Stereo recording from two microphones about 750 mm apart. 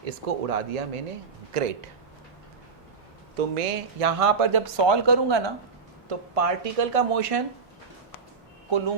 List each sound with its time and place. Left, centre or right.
0.0 s speech: right
3.3 s speech: right
6.1 s speech: right